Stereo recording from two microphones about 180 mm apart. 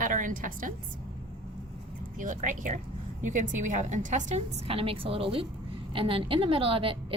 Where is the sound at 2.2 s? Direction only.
45° right (ahead or behind).